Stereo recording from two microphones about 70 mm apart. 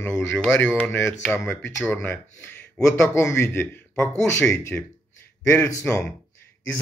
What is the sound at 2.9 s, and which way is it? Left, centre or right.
Speech, left.